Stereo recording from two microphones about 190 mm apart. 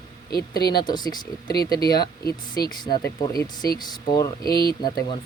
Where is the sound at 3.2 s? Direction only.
20° left (ahead or behind).